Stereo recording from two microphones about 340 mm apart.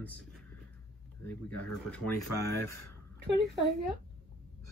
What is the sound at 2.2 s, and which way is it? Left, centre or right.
Speech, left.